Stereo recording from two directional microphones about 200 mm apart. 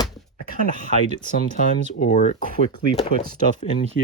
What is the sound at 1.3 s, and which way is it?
Speech, 40° left (ahead or behind).